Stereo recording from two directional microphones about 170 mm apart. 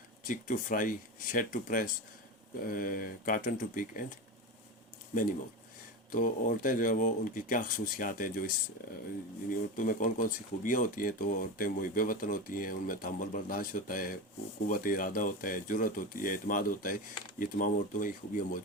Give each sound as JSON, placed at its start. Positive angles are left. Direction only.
{"t": 0.3, "sound": "speech", "side_deg": 50}
{"t": 6.1, "sound": "speech", "side_deg": 55}